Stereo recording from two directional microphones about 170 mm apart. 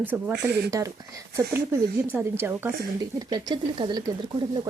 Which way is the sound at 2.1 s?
15° right (ahead or behind).